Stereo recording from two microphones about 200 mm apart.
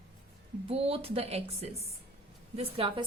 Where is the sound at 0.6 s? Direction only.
30° right (ahead or behind).